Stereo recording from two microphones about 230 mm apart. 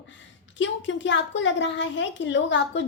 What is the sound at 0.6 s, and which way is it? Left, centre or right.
A woman's voice, left.